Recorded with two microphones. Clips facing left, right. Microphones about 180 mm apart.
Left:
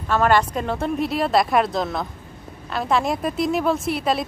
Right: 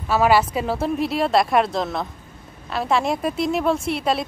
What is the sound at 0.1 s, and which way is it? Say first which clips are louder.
A woman's voice: right 1 dB; 5° right (ahead or behind).